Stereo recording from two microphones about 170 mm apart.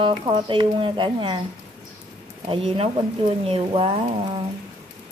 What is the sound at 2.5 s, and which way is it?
Speech, 35° right (ahead or behind).